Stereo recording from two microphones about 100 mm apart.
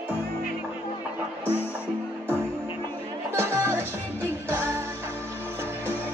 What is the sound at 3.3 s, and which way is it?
Music, 25° right (ahead or behind).